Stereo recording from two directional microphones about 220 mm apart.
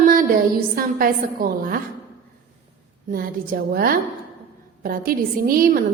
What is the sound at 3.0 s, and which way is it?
A woman's voice, 40° right (ahead or behind).